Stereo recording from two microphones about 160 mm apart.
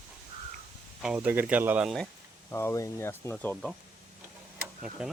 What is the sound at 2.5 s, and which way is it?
Speech, 15° left (ahead or behind).